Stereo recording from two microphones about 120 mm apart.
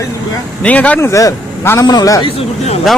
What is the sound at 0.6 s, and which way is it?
Speech, 10° left (ahead or behind).